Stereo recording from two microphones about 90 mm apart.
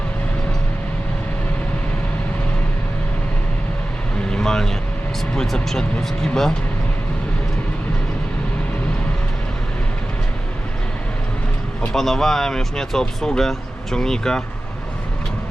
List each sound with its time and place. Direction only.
4.3 s vehicle: 5° left (ahead or behind)
5.3 s speech: 10° left (ahead or behind)
11.9 s speech: 5° left (ahead or behind)